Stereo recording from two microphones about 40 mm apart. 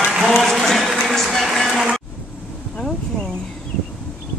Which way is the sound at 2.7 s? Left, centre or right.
Centre.